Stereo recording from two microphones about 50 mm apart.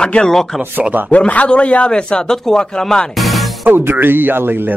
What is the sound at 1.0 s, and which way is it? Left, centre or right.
Speech, left.